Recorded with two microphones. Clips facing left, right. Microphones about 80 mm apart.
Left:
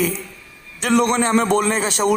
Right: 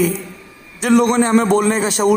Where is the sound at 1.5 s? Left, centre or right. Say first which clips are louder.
Right 3 dB; right.